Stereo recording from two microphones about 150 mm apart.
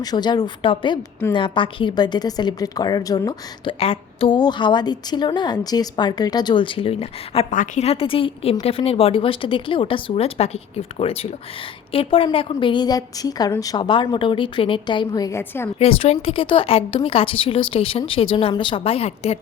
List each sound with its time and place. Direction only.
0.0 s a woman's voice: 25° left (ahead or behind)
7.5 s a woman's voice: 60° left (ahead or behind)
7.9 s a woman's voice: 40° left (ahead or behind); by 15.7 s 15° left (ahead or behind)
15.8 s a woman's voice: 40° left (ahead or behind)